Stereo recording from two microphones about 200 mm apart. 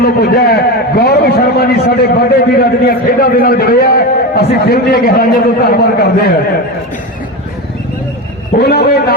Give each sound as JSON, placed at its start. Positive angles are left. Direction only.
{"t": 0.0, "sound": "a man's voice", "side_deg": 50}
{"t": 8.5, "sound": "a man's voice", "side_deg": 55}